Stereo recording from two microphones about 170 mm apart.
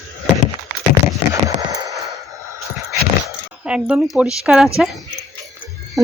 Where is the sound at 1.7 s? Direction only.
20° right (ahead or behind).